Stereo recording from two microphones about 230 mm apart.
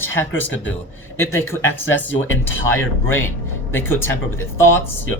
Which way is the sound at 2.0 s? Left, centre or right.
Left.